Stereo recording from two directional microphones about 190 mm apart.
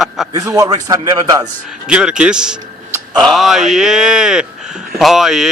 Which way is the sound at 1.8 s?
5° right (ahead or behind).